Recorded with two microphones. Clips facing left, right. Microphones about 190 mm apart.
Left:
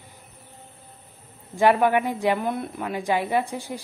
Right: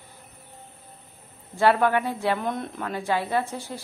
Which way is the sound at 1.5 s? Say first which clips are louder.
Left 2 dB; 15° left (ahead or behind).